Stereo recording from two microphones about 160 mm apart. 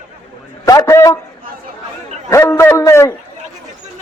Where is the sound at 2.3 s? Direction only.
15° left (ahead or behind).